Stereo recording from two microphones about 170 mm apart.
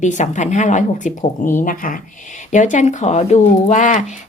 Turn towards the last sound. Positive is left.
turn(degrees=45)  # may be behind; listen again after turning